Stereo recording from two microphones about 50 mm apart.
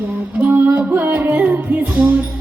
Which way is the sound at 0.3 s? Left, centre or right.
Right.